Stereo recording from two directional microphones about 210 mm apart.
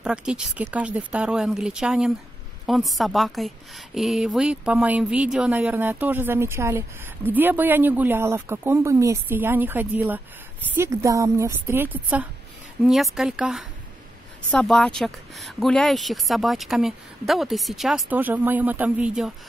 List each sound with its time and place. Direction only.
0.0 s a woman's voice: 5° right (ahead or behind)